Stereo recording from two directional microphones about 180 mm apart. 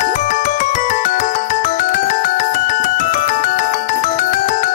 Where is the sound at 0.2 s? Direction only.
45° left (ahead or behind).